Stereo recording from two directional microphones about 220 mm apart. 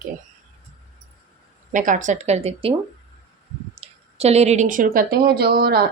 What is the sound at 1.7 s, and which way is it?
Speech, 35° right (ahead or behind).